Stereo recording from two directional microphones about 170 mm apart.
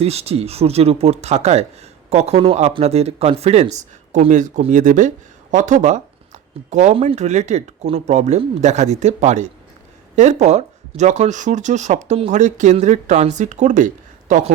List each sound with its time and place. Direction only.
0.0 s speech: 35° right (ahead or behind)